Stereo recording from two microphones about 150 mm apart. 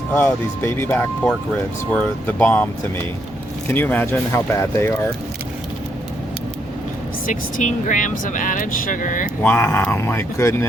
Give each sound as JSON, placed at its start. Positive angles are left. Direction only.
{"t": 0.1, "sound": "speech", "side_deg": 15}
{"t": 3.7, "sound": "speech", "side_deg": 15}
{"t": 7.3, "sound": "speech", "side_deg": 60}
{"t": 9.4, "sound": "speech", "side_deg": 10}